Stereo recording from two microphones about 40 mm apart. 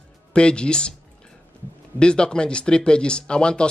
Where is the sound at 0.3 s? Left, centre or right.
Left.